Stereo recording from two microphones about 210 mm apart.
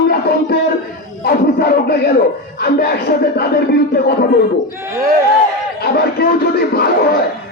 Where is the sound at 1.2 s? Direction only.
50° left (ahead or behind).